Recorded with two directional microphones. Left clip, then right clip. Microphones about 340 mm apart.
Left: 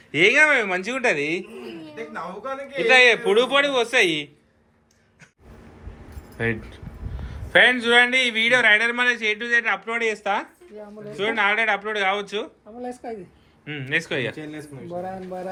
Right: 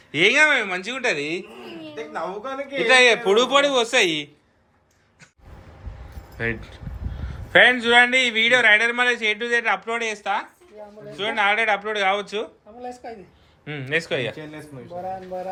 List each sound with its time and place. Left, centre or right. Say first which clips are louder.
0.1 s a man's voice: even; centre
2.1 s a man's voice: right 3 dB; right
2.8 s a man's voice: even; centre
6.3 s a man's voice: left 1 dB; centre
11.2 s a man's voice: even; centre
12.8 s speech: left 2 dB; left
13.7 s a man's voice: right 1 dB; centre